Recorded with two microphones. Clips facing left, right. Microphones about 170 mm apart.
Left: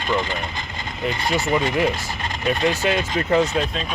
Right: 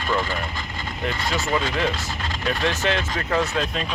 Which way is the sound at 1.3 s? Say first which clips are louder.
Left 4 dB; 15° left (ahead or behind).